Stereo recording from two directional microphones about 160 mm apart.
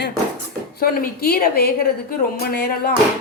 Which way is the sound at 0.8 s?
65° left (ahead or behind).